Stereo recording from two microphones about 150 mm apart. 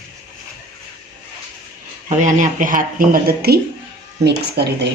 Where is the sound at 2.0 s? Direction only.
55° right (ahead or behind).